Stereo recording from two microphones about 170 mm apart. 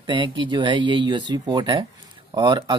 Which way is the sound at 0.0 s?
30° right (ahead or behind).